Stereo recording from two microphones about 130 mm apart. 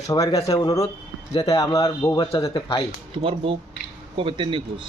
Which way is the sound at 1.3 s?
45° left (ahead or behind).